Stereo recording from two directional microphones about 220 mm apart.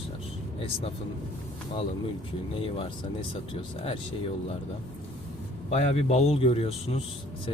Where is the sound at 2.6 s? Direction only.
25° left (ahead or behind).